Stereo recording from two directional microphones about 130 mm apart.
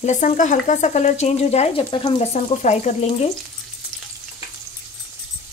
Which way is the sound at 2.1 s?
60° left (ahead or behind).